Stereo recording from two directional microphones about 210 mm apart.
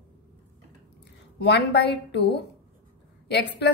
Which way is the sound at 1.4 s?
50° left (ahead or behind).